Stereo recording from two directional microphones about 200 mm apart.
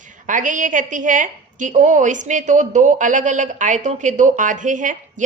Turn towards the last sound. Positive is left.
turn(degrees=-40)  # may be behind; listen again after turning